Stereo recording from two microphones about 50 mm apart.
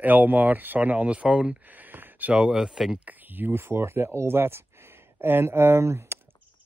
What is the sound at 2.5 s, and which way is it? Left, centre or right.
Speech, centre.